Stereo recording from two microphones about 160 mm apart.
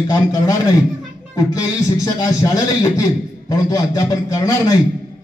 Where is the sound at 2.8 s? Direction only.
20° left (ahead or behind).